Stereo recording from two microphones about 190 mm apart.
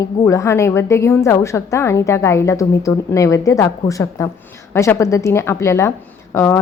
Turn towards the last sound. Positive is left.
turn(degrees=15)  # may be behind; listen again after turning